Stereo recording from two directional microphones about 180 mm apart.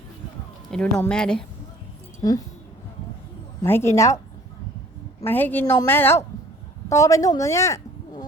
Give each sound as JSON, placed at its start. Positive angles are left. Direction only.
{"t": 0.7, "sound": "speech", "side_deg": 5}
{"t": 3.6, "sound": "a woman's voice", "side_deg": 15}
{"t": 5.2, "sound": "a woman's voice", "side_deg": 10}